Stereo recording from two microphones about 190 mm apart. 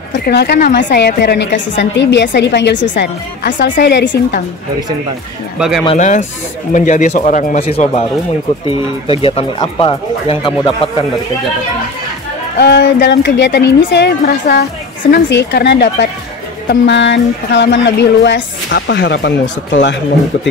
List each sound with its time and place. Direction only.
0.2 s a woman's voice: 60° left (ahead or behind)
3.7 s a woman's voice: 60° left (ahead or behind)
5.6 s speech: 5° right (ahead or behind)
5.9 s speech: 40° left (ahead or behind)
12.5 s a woman's voice: 65° left (ahead or behind)